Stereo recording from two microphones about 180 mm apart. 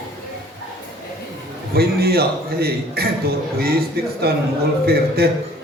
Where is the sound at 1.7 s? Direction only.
60° right (ahead or behind).